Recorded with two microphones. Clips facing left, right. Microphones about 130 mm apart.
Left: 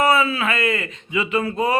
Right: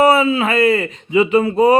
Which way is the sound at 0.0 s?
25° right (ahead or behind).